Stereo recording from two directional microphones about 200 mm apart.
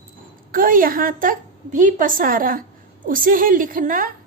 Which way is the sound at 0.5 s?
45° right (ahead or behind).